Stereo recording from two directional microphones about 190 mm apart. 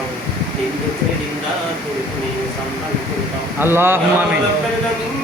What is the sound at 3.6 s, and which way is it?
Speech, 10° right (ahead or behind).